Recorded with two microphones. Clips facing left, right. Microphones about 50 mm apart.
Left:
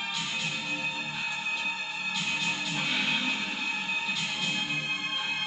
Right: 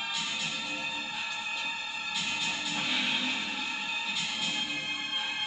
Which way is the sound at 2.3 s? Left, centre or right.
Centre.